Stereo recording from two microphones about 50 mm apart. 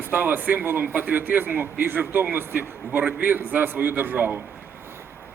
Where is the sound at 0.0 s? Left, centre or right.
Right.